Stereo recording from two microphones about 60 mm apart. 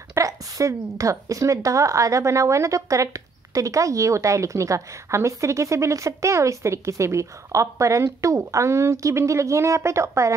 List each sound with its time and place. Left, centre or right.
0.1 s a woman's voice: right